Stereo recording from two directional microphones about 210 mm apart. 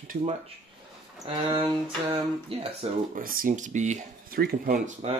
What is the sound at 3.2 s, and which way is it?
Speech, 40° right (ahead or behind).